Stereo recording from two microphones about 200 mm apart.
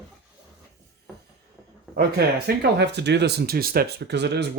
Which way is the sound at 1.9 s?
55° right (ahead or behind).